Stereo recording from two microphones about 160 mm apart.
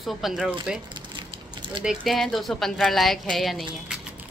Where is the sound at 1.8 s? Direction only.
Centre (ahead or behind).